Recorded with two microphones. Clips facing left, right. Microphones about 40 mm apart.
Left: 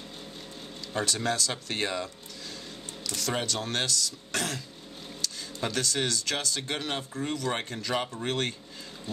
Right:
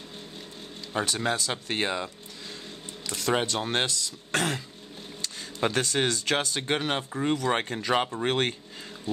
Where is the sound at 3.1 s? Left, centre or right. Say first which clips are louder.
Right 4 dB; right.